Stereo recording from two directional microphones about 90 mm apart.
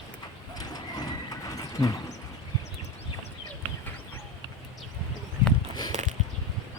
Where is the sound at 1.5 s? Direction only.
40° left (ahead or behind).